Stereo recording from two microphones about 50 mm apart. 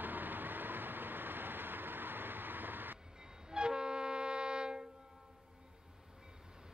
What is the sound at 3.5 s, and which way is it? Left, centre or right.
Train, centre.